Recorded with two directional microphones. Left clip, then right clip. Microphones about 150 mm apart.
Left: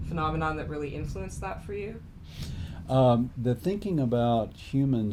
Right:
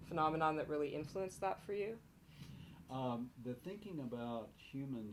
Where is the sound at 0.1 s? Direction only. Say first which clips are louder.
Left 6 dB; 45° right (ahead or behind).